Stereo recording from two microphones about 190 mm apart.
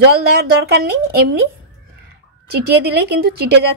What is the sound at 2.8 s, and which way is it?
Speech, 55° right (ahead or behind).